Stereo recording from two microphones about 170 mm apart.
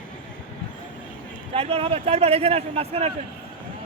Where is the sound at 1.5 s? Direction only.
35° right (ahead or behind).